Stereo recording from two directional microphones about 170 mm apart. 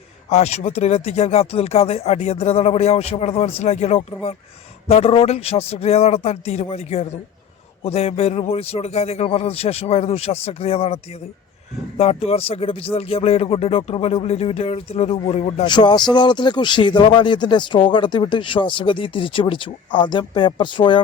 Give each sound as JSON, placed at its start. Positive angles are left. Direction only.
{"t": 0.3, "sound": "speech", "side_deg": 40}
{"t": 15.6, "sound": "speech", "side_deg": 25}